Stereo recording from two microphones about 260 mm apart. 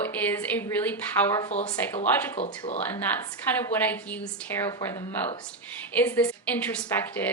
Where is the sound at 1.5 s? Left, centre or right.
Left.